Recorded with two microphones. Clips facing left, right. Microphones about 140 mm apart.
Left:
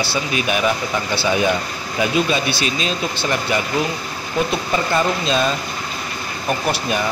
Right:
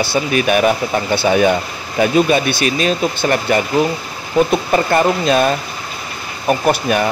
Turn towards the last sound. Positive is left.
turn(degrees=-50)  # may be behind; listen again after turning